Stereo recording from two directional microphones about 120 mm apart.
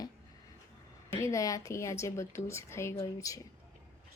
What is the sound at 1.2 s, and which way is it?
Speech, 25° left (ahead or behind).